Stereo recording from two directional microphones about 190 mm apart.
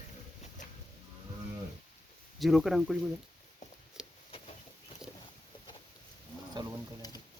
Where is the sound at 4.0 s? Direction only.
Centre (ahead or behind).